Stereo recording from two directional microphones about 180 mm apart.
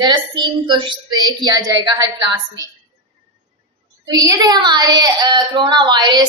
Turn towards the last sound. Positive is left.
turn(degrees=-25)  # may be behind; listen again after turning